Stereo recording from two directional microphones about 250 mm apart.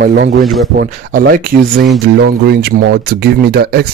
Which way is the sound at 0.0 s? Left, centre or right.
Right.